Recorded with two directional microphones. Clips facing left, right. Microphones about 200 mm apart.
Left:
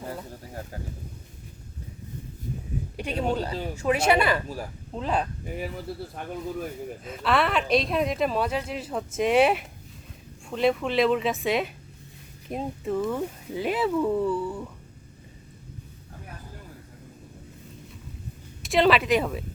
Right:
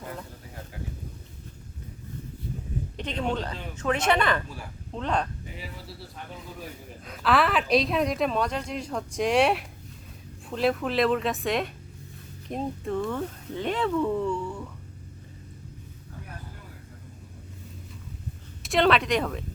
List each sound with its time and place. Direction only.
3.0 s speech: 10° left (ahead or behind)
5.5 s speech: 50° left (ahead or behind)
7.0 s a woman's voice: centre (ahead or behind)
18.6 s a woman's voice: centre (ahead or behind)